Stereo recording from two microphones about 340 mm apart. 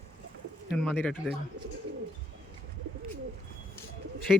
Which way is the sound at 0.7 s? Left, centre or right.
Centre.